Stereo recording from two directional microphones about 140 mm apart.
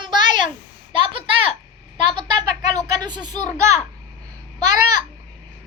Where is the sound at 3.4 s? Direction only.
55° left (ahead or behind).